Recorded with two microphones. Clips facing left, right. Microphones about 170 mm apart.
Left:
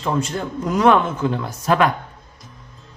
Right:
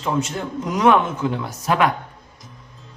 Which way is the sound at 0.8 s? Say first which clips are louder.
Even; 5° right (ahead or behind).